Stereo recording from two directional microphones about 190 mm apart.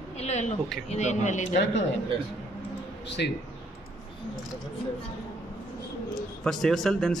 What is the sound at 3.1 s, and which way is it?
Speech, 65° left (ahead or behind).